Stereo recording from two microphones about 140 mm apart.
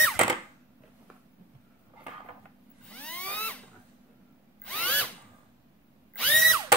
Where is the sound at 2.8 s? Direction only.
10° left (ahead or behind).